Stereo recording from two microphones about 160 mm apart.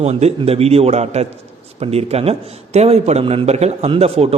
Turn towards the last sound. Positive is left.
turn(degrees=-40)  # may be behind; listen again after turning